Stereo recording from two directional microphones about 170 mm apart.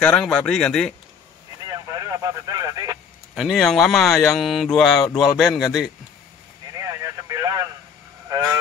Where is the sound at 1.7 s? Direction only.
20° right (ahead or behind).